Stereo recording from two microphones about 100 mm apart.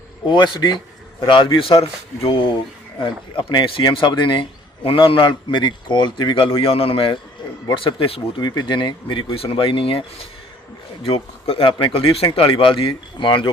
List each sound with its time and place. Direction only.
0.3 s a man's voice: 50° left (ahead or behind)
8.4 s speech: 45° left (ahead or behind); by 10.0 s 65° left (ahead or behind)
11.0 s speech: 75° left (ahead or behind); by 13.5 s 55° left (ahead or behind)